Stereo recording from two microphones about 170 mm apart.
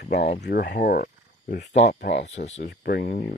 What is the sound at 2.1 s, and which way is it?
Speech, 40° left (ahead or behind).